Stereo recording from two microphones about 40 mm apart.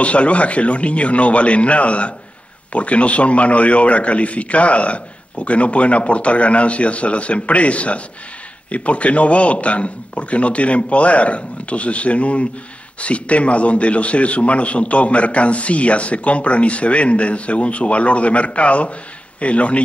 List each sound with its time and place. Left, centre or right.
0.0 s a man's voice: left